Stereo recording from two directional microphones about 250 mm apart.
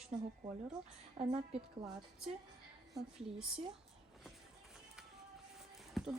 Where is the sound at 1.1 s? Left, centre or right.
Right.